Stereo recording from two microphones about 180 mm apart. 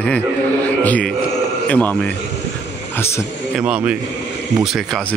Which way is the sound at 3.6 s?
10° right (ahead or behind).